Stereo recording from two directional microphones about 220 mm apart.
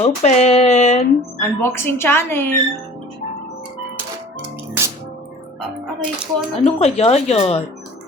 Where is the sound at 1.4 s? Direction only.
10° left (ahead or behind).